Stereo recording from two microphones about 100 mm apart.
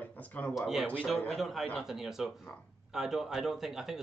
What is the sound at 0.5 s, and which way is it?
A man's voice, 5° right (ahead or behind).